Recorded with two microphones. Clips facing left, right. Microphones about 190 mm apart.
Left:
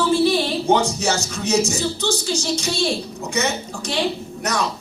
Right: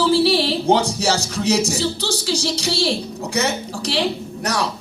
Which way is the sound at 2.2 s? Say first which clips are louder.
Right 2 dB; 70° right (ahead or behind).